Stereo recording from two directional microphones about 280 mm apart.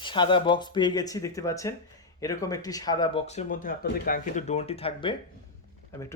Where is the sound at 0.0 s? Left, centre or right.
Centre.